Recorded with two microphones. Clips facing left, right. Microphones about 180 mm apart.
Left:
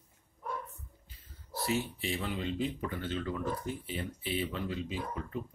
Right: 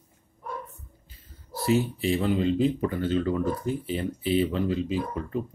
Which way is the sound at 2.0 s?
35° right (ahead or behind).